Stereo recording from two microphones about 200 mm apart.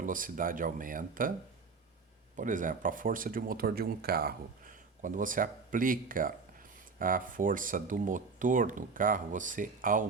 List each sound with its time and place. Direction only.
0.0 s speech: 45° right (ahead or behind)
2.3 s speech: 40° right (ahead or behind)